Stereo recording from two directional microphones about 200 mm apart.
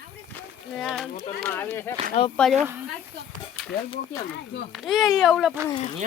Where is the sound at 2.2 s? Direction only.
30° left (ahead or behind).